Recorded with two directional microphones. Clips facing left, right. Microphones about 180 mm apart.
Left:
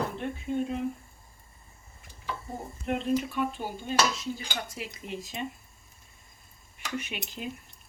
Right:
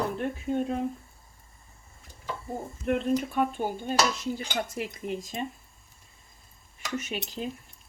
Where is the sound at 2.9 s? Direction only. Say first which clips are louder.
Right 2 dB; 50° right (ahead or behind).